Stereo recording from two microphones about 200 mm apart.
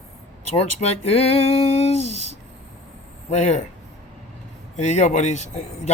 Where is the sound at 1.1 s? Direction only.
30° left (ahead or behind).